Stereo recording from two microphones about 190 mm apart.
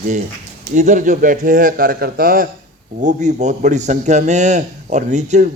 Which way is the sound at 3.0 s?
40° right (ahead or behind).